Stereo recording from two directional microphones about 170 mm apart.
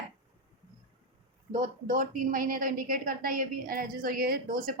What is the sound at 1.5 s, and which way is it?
A woman's voice, 50° right (ahead or behind).